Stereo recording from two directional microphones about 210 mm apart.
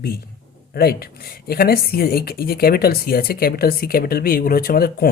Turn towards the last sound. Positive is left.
turn(degrees=45)  # may be behind; listen again after turning